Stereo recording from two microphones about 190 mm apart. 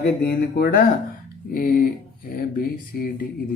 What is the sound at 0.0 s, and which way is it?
Speech, 55° left (ahead or behind).